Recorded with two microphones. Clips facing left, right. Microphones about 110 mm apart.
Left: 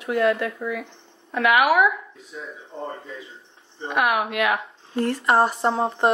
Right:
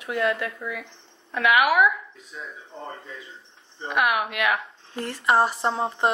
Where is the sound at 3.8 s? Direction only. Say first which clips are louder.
Left 2 dB; 20° left (ahead or behind).